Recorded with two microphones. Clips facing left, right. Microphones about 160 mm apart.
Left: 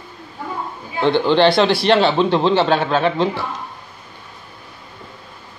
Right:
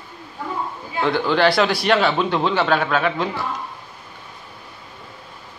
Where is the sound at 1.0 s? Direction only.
25° left (ahead or behind).